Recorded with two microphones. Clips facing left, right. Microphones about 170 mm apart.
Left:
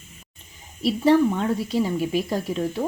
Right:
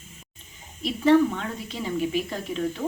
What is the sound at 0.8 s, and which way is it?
Speech, 35° left (ahead or behind).